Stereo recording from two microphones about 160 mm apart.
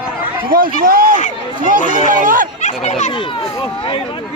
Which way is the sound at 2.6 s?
45° left (ahead or behind).